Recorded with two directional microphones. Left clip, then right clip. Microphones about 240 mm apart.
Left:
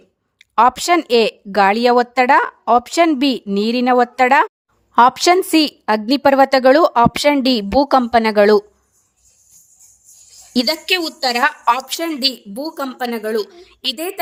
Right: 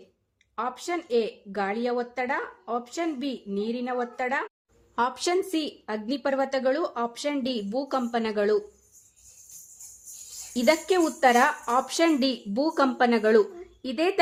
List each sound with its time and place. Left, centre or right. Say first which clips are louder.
0.5 s a woman's voice: left 18 dB; left
10.9 s speech: left 4 dB; centre